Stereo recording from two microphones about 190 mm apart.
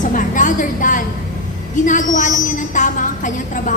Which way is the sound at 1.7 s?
40° left (ahead or behind).